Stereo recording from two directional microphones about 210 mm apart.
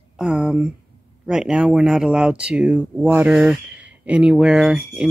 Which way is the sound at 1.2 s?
5° right (ahead or behind).